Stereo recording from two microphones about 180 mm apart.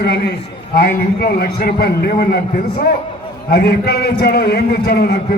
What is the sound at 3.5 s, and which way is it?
A man's voice, 60° left (ahead or behind).